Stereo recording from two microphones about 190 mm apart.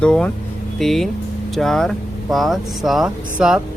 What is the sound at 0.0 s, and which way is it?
Speech, 5° left (ahead or behind).